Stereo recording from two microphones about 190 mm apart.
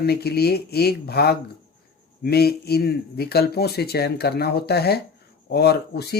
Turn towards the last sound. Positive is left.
turn(degrees=60)  # may be behind; listen again after turning